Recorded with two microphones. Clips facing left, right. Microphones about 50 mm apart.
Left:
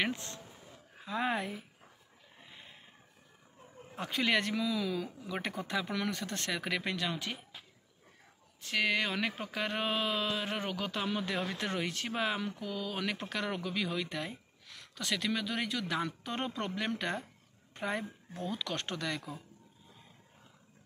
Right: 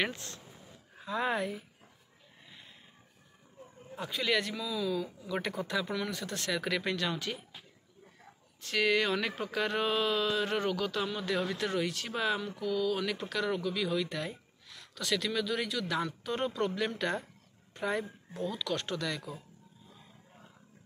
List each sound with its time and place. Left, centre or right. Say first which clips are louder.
0.1 s speech: left 3 dB; left
3.9 s speech: even; left
5.6 s speech: right 2 dB; left
5.9 s speech: even; left
8.6 s speech: right 3 dB; centre
14.7 s a sound: right 1 dB; left
15.0 s a woman's voice: right 2 dB; left
18.3 s speech: right 3 dB; left